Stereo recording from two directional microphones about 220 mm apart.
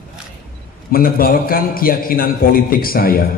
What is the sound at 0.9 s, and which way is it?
A man's voice, 40° left (ahead or behind).